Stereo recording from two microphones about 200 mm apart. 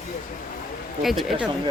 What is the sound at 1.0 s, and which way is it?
Speech, centre (ahead or behind).